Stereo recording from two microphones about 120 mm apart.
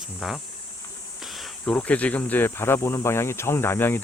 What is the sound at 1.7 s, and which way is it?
Speech, 10° left (ahead or behind).